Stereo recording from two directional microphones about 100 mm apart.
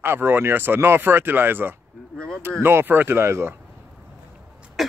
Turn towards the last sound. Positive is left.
turn(degrees=0)  # may be behind; listen again after turning